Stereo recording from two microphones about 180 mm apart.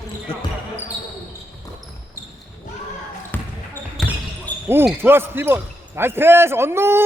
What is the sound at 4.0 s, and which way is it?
Basketball bounce, centre (ahead or behind).